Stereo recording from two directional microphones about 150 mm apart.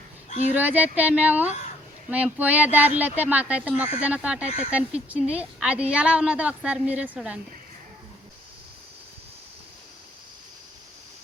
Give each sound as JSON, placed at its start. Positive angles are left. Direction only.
{"t": 0.5, "sound": "a woman's voice", "side_deg": -10}
{"t": 4.4, "sound": "speech", "side_deg": 50}
{"t": 4.7, "sound": "a woman's voice", "side_deg": -10}